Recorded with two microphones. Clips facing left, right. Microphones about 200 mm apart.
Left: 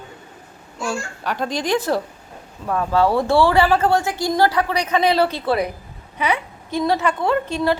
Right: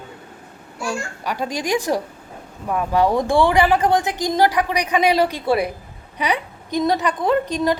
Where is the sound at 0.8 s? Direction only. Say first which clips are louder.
Even; 10° right (ahead or behind).